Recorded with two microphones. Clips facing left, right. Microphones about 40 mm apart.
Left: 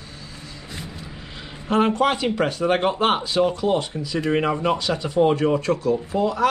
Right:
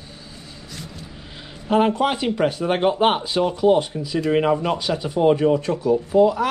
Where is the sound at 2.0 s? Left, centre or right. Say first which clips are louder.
Left 1 dB; centre.